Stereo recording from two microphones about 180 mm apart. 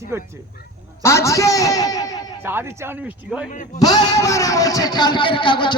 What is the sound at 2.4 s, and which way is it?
Speech, 10° right (ahead or behind).